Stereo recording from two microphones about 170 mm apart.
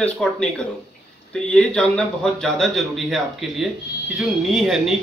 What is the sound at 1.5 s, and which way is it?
Speech, 5° left (ahead or behind).